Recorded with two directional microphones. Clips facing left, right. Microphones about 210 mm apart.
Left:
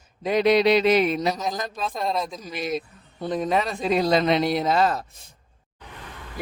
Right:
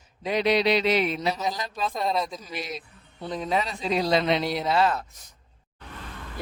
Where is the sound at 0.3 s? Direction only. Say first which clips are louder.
Left 4 dB; 45° left (ahead or behind).